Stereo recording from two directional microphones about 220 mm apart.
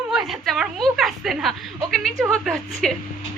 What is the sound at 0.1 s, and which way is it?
A woman's voice, centre (ahead or behind).